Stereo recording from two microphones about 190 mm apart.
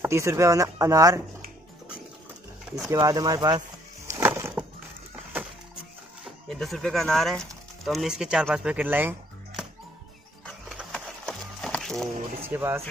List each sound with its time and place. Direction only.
0.0 s speech: 15° right (ahead or behind)
2.9 s speech: 20° right (ahead or behind)
4.1 s a sound: 10° right (ahead or behind)
6.2 s speech: centre (ahead or behind)
10.4 s a sound: centre (ahead or behind)
12.4 s speech: 10° right (ahead or behind)